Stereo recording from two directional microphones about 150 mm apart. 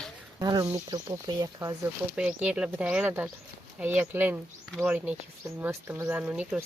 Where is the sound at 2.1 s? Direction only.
5° right (ahead or behind).